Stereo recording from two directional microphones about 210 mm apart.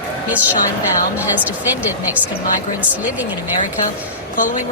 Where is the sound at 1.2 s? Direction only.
10° right (ahead or behind).